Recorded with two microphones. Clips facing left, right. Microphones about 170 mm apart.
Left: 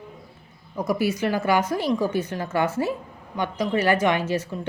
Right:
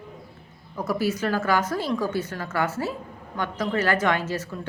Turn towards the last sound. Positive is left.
turn(degrees=15)  # may be behind; listen again after turning